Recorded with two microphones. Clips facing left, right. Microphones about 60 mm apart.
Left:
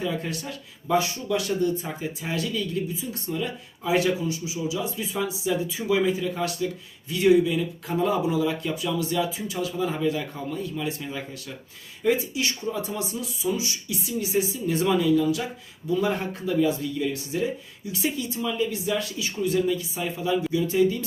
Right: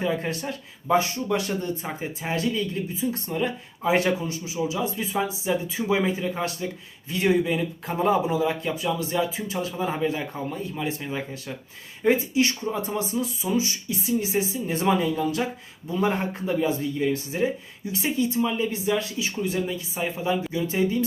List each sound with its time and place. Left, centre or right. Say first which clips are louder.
0.0 s speech: right 3 dB; right